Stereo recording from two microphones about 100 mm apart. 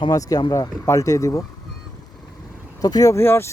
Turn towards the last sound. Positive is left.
turn(degrees=20)  # may be behind; listen again after turning